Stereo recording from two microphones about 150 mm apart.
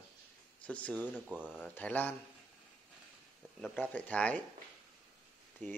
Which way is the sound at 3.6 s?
10° left (ahead or behind).